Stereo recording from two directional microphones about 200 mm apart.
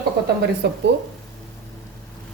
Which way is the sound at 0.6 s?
55° right (ahead or behind).